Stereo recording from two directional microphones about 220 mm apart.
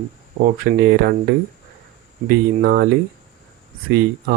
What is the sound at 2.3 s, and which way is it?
Speech, 45° right (ahead or behind).